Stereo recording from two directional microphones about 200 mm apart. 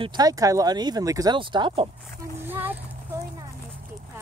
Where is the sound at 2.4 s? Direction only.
10° right (ahead or behind).